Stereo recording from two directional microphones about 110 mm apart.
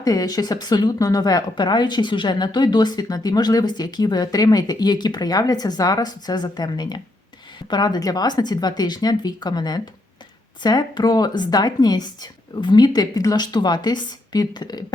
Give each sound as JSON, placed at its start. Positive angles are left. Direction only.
{"t": 0.0, "sound": "a woman's voice", "side_deg": 35}